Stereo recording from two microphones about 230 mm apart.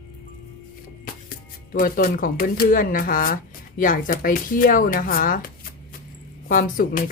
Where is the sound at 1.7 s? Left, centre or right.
Left.